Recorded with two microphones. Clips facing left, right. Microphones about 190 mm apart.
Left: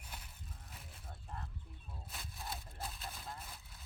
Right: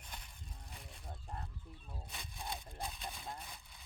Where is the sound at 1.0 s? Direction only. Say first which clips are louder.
Right 2 dB; 35° right (ahead or behind).